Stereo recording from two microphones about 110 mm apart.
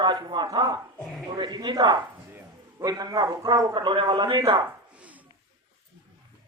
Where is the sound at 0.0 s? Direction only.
45° right (ahead or behind).